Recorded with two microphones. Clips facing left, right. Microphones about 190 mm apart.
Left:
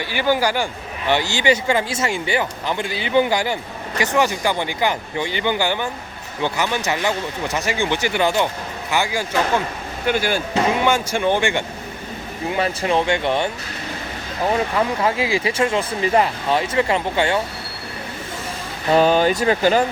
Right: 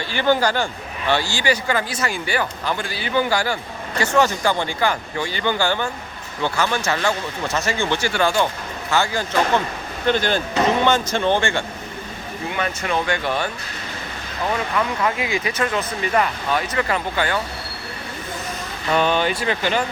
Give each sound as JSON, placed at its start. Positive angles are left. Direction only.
{"t": 0.1, "sound": "a man's voice", "side_deg": 10}
{"t": 12.5, "sound": "a man's voice", "side_deg": 30}
{"t": 14.5, "sound": "a man's voice", "side_deg": 30}
{"t": 18.9, "sound": "speech", "side_deg": 35}